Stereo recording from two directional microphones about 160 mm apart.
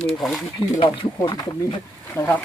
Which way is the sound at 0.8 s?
30° left (ahead or behind).